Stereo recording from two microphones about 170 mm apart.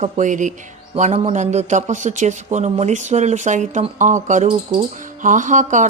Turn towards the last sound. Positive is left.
turn(degrees=-45)  # may be behind; listen again after turning